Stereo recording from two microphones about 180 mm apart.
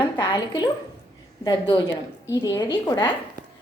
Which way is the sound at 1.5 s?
25° left (ahead or behind).